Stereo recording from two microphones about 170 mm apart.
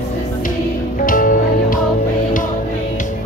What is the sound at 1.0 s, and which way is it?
Music, 55° left (ahead or behind).